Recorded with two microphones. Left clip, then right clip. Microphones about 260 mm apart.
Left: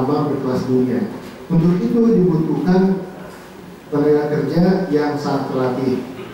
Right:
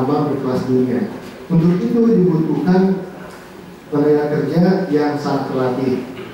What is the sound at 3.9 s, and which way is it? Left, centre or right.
A man's voice, centre.